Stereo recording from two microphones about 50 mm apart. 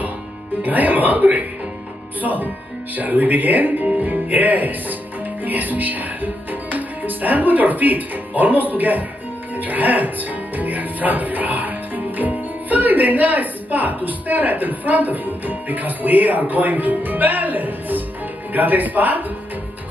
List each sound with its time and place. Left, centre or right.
0.6 s speech: right